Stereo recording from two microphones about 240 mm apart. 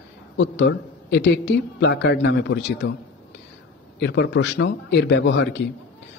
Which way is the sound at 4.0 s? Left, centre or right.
Left.